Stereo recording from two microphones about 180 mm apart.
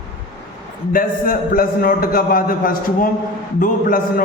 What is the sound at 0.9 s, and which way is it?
A man's voice, 50° left (ahead or behind).